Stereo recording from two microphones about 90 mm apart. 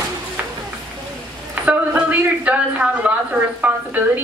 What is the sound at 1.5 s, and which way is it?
A woman's voice, 20° right (ahead or behind).